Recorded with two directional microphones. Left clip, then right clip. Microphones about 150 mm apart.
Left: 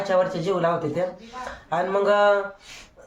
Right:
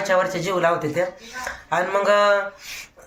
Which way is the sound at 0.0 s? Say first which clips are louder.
Right 2 dB; 20° right (ahead or behind).